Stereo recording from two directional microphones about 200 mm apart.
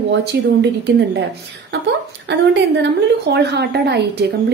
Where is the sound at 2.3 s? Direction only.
60° right (ahead or behind).